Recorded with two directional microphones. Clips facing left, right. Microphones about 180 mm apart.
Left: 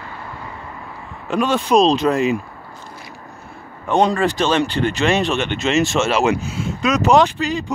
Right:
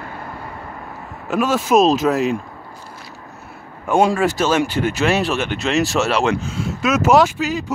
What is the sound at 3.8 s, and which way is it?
Speech, 5° right (ahead or behind).